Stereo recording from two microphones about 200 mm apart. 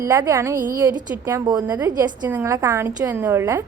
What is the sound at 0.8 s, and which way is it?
A woman's voice, 20° right (ahead or behind).